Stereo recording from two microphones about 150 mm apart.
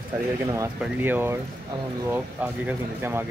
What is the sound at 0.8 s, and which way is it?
Speech, 10° right (ahead or behind).